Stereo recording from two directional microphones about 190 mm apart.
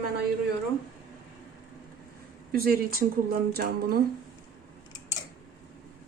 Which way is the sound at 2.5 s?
50° right (ahead or behind).